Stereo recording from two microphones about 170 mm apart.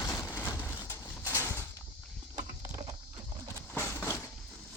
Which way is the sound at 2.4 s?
20° right (ahead or behind).